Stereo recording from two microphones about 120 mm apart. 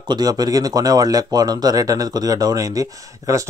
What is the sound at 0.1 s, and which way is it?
Speech, 35° right (ahead or behind).